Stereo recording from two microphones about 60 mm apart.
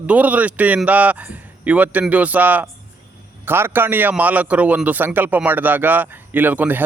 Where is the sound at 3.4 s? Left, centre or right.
Right.